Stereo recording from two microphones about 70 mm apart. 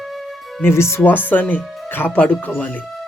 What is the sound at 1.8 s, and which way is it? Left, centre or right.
Music, left.